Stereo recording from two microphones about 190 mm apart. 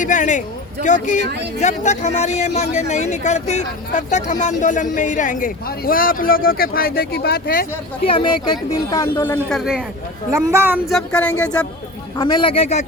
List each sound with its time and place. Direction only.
0.0 s speech: 40° left (ahead or behind)
8.7 s speech: 15° left (ahead or behind); by 9.8 s centre (ahead or behind)
10.3 s speech: 10° right (ahead or behind)
10.8 s speech: 5° left (ahead or behind)
12.1 s a man's voice: 25° left (ahead or behind)